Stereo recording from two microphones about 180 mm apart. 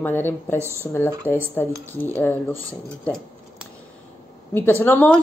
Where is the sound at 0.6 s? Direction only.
15° right (ahead or behind).